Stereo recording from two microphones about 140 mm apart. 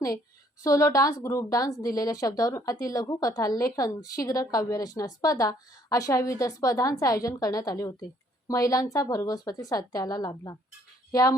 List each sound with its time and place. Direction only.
0.6 s a woman's voice: 25° left (ahead or behind)